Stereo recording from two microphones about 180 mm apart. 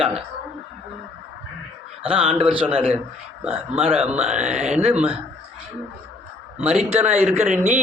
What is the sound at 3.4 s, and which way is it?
Speech, 10° right (ahead or behind).